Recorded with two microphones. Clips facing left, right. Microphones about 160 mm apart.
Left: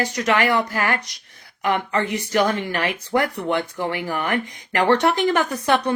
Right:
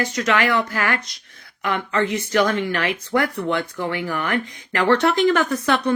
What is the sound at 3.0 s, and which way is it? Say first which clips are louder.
Speech: even; 15° left (ahead or behind).